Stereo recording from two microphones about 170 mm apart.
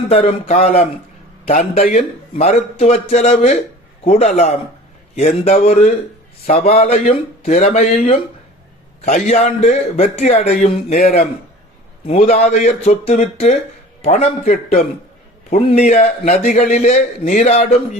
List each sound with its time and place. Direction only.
0.1 s a man's voice: 40° left (ahead or behind)
6.7 s a man's voice: 35° left (ahead or behind)
9.0 s a man's voice: 50° left (ahead or behind)
12.0 s a man's voice: 35° left (ahead or behind)
15.4 s a man's voice: 45° left (ahead or behind)
15.8 s a man's voice: 55° left (ahead or behind)